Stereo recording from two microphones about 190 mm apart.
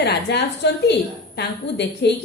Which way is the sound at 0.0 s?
60° left (ahead or behind).